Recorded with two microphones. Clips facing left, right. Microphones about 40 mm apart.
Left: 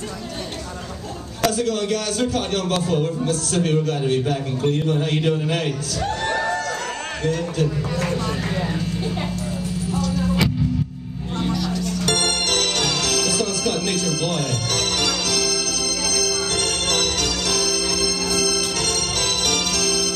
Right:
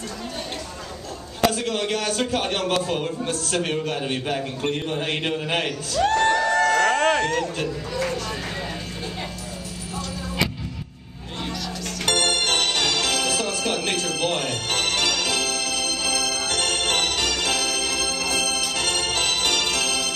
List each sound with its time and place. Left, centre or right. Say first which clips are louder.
1.4 s a man's voice: left 1 dB; right
5.9 s crowd: right 6 dB; right
12.1 s music: right 1 dB; right